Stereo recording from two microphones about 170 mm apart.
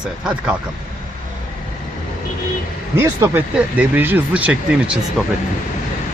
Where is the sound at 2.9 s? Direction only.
10° right (ahead or behind).